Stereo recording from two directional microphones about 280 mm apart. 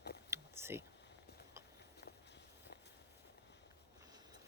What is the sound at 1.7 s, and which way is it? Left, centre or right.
Walk, left.